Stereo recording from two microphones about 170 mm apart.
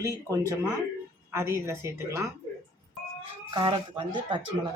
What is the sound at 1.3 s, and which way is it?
Speech, 15° right (ahead or behind).